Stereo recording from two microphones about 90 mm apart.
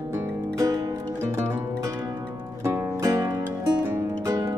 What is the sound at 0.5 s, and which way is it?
Music, 40° right (ahead or behind).